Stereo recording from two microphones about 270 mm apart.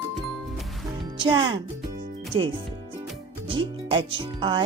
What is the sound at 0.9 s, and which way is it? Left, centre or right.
Music, centre.